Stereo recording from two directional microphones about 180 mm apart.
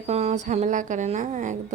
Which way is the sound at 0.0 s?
35° right (ahead or behind).